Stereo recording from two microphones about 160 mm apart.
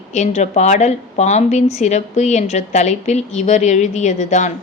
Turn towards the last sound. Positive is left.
turn(degrees=50)  # may be behind; listen again after turning